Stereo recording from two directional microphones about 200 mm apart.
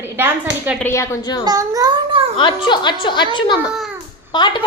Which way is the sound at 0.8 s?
15° left (ahead or behind).